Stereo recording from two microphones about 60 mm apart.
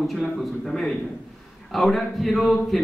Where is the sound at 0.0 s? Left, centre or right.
Centre.